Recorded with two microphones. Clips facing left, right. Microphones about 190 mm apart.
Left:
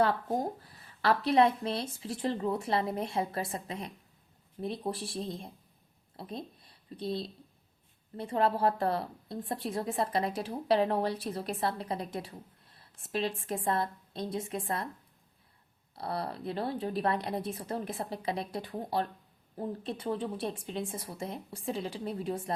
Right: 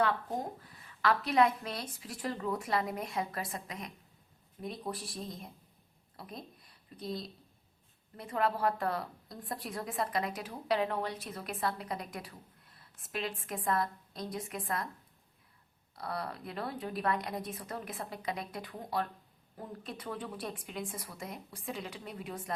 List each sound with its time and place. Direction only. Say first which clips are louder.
0.0 s a woman's voice: left 4 dB; 35° left (ahead or behind)
16.0 s a woman's voice: left 3 dB; 30° left (ahead or behind)